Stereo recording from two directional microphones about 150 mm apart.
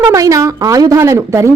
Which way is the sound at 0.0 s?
20° right (ahead or behind).